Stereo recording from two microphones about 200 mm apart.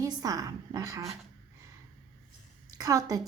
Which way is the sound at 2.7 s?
15° right (ahead or behind).